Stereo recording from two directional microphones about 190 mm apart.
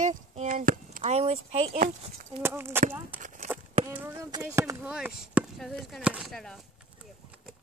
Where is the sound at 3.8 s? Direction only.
10° right (ahead or behind).